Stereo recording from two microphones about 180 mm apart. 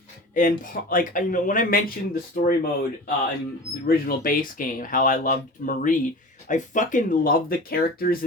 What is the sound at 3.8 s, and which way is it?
Speech, 55° left (ahead or behind).